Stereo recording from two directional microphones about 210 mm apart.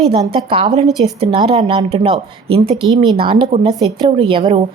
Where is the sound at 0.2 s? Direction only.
20° right (ahead or behind).